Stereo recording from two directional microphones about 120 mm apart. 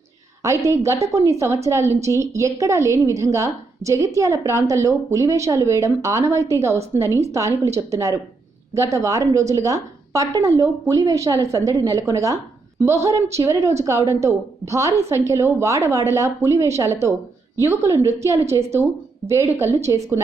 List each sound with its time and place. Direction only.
0.4 s a woman's voice: 25° right (ahead or behind)